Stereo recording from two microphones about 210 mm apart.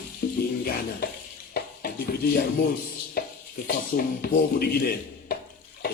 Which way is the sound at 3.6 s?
45° left (ahead or behind).